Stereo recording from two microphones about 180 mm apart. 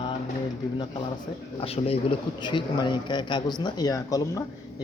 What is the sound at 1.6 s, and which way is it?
A man's voice, 35° left (ahead or behind).